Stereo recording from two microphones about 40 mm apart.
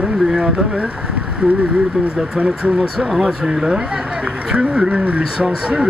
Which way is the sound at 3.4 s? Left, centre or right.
Centre.